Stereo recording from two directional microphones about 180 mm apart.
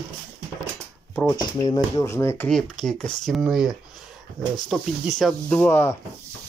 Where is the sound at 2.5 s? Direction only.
5° left (ahead or behind).